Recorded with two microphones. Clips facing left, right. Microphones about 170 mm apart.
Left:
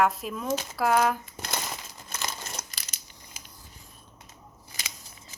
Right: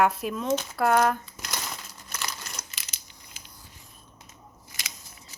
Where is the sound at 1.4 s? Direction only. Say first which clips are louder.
Left 2 dB; 25° left (ahead or behind).